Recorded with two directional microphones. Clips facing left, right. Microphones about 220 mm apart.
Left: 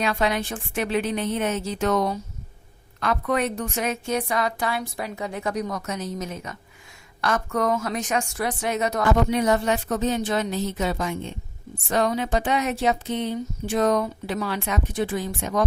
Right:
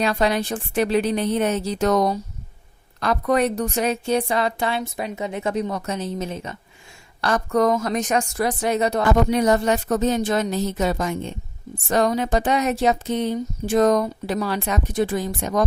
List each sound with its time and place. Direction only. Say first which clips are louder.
0.0 s a woman's voice: right 3 dB; 35° right (ahead or behind)